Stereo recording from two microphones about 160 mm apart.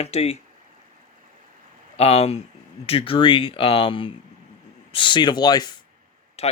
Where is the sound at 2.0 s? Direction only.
40° left (ahead or behind).